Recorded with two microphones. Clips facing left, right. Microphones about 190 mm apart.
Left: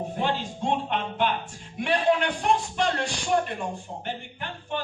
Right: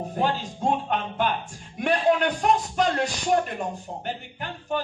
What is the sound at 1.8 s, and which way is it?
Music, 45° right (ahead or behind).